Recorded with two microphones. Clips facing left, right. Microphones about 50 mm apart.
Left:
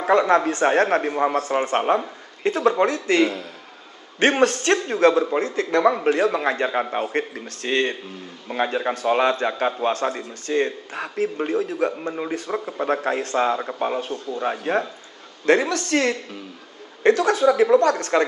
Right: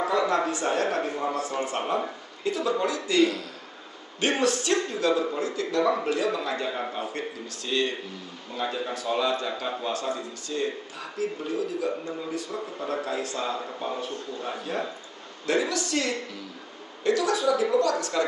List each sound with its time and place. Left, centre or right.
0.0 s a man's voice: left